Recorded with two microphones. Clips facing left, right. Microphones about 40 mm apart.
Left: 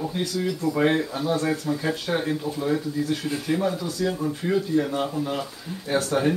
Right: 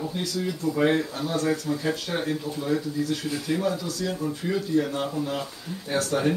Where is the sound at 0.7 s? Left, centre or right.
Centre.